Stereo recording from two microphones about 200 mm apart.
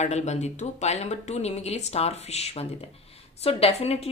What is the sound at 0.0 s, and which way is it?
Speech, 35° left (ahead or behind).